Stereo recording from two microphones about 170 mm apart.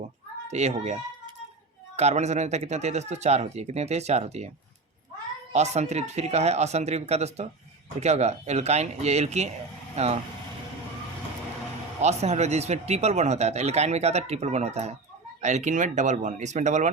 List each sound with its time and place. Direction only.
0.5 s speech: 40° right (ahead or behind)
5.5 s speech: 40° right (ahead or behind)
12.0 s speech: 40° right (ahead or behind)